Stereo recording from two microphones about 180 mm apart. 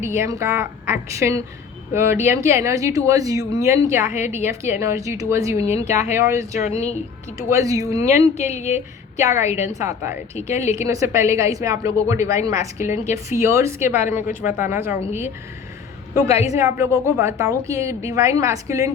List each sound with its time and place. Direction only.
0.0 s speech: 15° right (ahead or behind)
6.6 s a woman's voice: 40° left (ahead or behind)
7.3 s speech: 20° right (ahead or behind)
8.4 s a woman's voice: 40° left (ahead or behind)
9.1 s speech: 15° right (ahead or behind)
16.1 s speech: 15° right (ahead or behind)